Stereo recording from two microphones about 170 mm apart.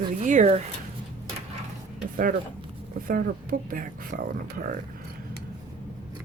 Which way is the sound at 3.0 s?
55° right (ahead or behind).